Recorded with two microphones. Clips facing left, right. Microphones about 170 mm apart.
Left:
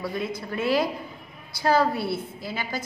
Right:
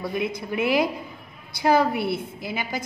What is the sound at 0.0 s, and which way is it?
A woman's voice, 15° right (ahead or behind).